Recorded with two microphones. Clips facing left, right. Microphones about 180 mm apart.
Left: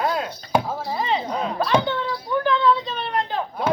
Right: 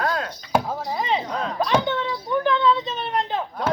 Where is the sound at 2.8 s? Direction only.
20° right (ahead or behind).